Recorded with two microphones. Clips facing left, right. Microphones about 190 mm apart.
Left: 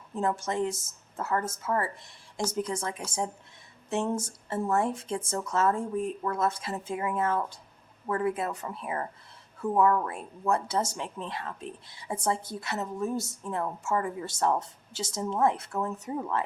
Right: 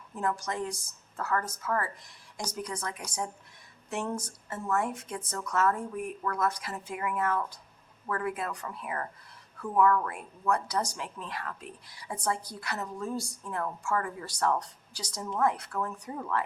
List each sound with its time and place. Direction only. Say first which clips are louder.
0.1 s speech: left 3 dB; 25° left (ahead or behind)